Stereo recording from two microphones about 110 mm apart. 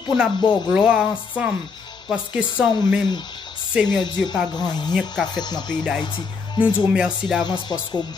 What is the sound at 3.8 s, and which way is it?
Speech, 40° left (ahead or behind).